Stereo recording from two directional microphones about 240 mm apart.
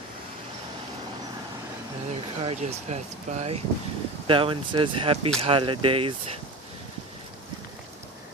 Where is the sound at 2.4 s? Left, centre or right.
Right.